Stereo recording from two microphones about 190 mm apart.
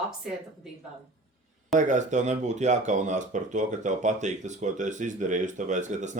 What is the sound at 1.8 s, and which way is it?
Speech, 40° right (ahead or behind).